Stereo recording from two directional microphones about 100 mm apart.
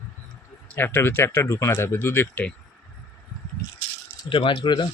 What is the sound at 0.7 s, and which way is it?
Speech, 20° left (ahead or behind).